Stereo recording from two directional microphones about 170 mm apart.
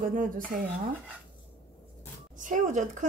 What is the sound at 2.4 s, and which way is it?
Speech, 50° right (ahead or behind).